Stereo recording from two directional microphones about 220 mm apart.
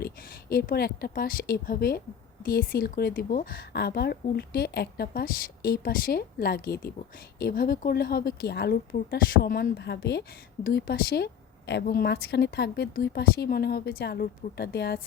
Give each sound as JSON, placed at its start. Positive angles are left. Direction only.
{"t": 0.0, "sound": "a woman's voice", "side_deg": 45}